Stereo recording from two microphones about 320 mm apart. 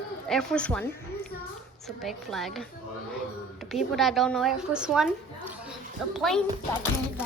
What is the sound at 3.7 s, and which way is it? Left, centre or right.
A woman's voice, centre.